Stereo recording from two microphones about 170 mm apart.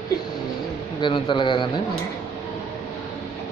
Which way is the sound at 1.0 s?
30° left (ahead or behind).